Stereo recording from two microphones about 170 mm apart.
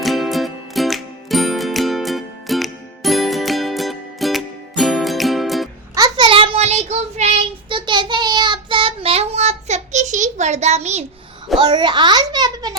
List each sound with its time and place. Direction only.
0.0 s music: centre (ahead or behind)
5.9 s child singing: 25° right (ahead or behind); by 11.0 s 40° right (ahead or behind)
11.5 s a sound: 25° right (ahead or behind)